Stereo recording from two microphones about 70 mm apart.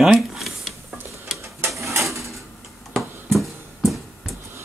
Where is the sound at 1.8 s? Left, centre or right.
Right.